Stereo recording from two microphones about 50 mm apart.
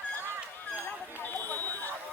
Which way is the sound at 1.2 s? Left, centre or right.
Left.